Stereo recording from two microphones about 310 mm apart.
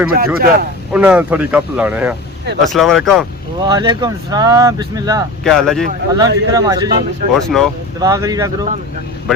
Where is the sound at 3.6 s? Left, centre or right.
Centre.